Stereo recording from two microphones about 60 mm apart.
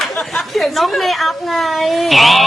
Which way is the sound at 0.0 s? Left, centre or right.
Centre.